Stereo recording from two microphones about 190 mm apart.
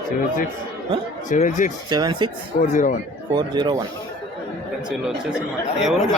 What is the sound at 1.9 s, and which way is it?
Speech, 25° right (ahead or behind).